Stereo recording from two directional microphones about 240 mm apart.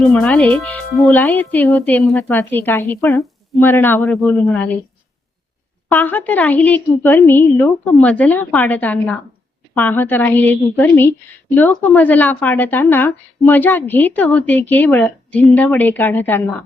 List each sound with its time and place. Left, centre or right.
0.0 s a woman's voice: centre
5.9 s a woman's voice: centre